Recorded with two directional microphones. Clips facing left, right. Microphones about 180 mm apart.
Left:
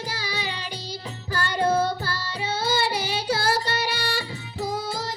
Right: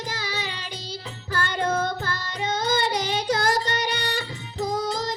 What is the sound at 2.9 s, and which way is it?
Child singing, 5° left (ahead or behind).